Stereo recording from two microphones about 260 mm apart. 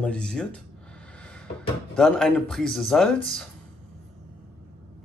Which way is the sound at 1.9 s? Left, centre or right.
Centre.